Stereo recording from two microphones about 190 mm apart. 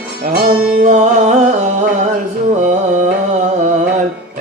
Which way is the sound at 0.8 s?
40° right (ahead or behind).